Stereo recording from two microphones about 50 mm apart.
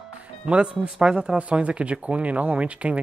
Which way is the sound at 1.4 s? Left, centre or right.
Right.